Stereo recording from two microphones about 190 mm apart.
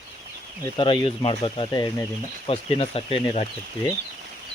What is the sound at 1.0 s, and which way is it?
Speech, 25° left (ahead or behind).